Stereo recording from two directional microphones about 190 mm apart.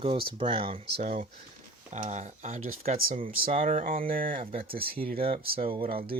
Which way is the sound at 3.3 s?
50° right (ahead or behind).